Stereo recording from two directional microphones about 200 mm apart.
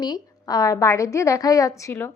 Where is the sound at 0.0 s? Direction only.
20° left (ahead or behind).